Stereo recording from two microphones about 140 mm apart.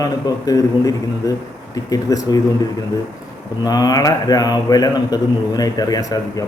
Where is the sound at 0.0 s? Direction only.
25° left (ahead or behind).